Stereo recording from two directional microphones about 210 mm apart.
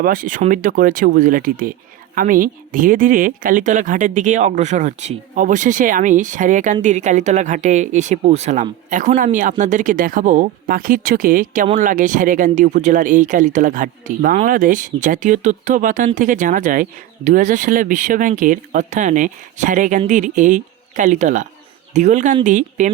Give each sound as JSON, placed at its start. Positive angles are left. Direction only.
{"t": 0.0, "sound": "speech", "side_deg": -40}